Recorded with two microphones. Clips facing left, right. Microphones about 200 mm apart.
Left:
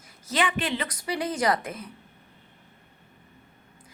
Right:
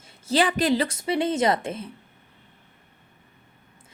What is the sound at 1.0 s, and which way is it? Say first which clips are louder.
Speech: right 5 dB; 25° right (ahead or behind).